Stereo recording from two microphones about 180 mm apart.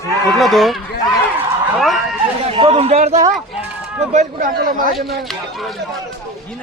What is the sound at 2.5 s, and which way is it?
A man's voice, 30° right (ahead or behind).